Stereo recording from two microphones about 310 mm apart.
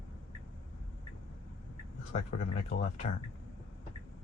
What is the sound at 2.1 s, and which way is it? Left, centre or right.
Speech, left.